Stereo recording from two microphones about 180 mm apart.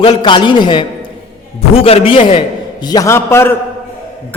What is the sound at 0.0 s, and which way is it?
A man's voice, 25° left (ahead or behind).